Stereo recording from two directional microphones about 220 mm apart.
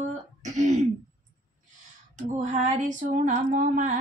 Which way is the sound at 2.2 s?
35° right (ahead or behind).